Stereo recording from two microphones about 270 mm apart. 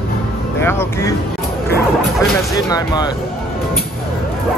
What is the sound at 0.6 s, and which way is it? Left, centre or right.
Speech, centre.